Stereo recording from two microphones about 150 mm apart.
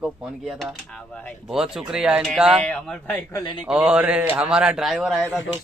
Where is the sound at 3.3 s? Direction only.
30° left (ahead or behind).